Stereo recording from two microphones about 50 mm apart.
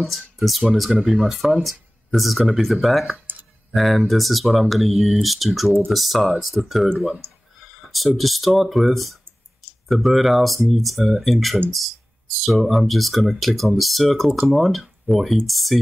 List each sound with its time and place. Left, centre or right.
0.0 s speech: centre
7.2 s a sound: right
8.2 s speech: centre